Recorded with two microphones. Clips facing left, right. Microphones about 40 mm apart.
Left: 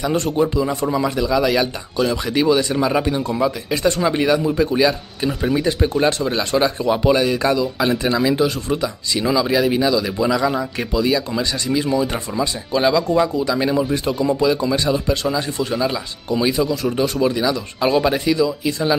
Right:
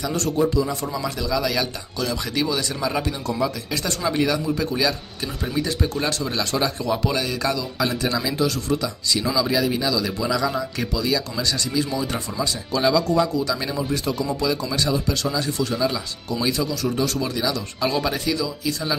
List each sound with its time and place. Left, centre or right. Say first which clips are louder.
0.0 s speech: left 3 dB; left
5.4 s speech: left 5 dB; centre
5.7 s speech: left 7 dB; left